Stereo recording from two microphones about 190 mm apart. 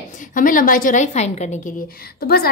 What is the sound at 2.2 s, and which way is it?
Speech, 55° left (ahead or behind).